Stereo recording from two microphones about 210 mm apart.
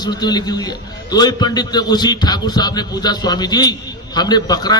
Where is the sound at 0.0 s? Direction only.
20° left (ahead or behind).